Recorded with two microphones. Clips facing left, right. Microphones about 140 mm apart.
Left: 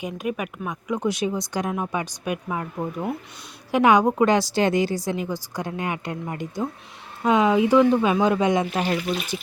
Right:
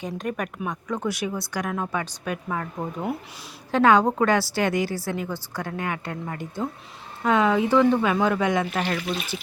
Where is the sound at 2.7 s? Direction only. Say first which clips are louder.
Left 1 dB; centre (ahead or behind).